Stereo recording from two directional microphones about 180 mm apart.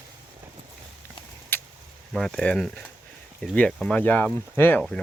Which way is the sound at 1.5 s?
10° left (ahead or behind).